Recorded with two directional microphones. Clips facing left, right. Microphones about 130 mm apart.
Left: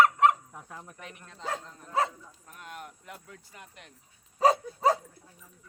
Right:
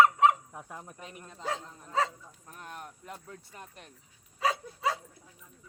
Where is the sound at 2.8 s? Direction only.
30° right (ahead or behind).